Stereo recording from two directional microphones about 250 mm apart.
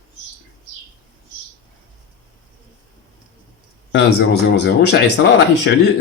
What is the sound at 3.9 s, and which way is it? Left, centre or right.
Speech, left.